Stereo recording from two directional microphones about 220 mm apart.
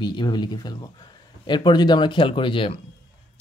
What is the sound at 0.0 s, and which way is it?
Speech, 20° left (ahead or behind).